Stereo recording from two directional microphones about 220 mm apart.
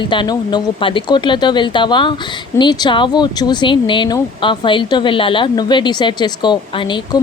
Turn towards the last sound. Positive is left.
turn(degrees=20)  # may be behind; listen again after turning